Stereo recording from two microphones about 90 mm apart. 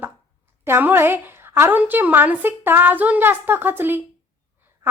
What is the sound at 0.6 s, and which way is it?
A woman's voice, 25° right (ahead or behind).